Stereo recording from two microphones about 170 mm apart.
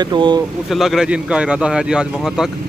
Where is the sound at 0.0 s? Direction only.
25° right (ahead or behind).